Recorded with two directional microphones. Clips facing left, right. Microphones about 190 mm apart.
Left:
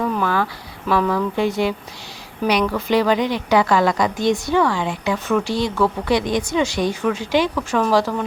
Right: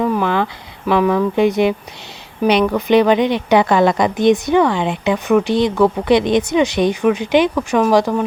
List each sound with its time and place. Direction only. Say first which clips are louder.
0.0 s a woman's voice: right 4 dB; 15° right (ahead or behind)